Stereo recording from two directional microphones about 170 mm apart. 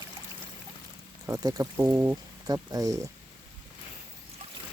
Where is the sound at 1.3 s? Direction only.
20° right (ahead or behind).